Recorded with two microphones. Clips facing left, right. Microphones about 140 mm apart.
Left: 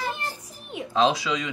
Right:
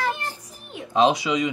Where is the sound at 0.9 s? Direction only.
20° right (ahead or behind).